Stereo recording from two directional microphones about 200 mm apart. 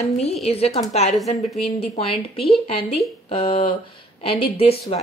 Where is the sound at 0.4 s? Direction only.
30° left (ahead or behind).